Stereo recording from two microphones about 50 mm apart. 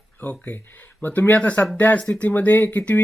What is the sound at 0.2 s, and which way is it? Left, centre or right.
Speech, left.